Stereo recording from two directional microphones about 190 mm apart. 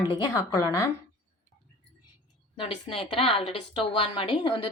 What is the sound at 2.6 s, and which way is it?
A woman's voice, 30° left (ahead or behind).